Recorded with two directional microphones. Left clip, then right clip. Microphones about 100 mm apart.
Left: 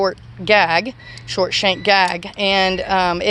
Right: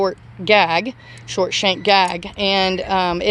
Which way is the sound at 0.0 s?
35° right (ahead or behind).